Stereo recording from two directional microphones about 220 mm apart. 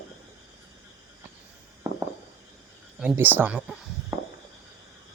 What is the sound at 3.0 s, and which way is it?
Speech, 5° right (ahead or behind).